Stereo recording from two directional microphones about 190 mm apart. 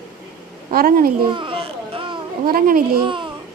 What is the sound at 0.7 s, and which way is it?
Speech, 50° right (ahead or behind).